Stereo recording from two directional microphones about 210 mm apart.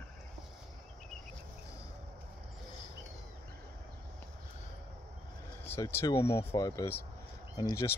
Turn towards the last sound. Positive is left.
turn(degrees=15)  # may be behind; listen again after turning